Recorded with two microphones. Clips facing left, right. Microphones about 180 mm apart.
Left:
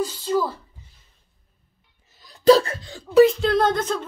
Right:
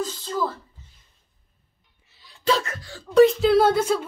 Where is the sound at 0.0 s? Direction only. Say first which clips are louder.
Left 4 dB; 10° left (ahead or behind).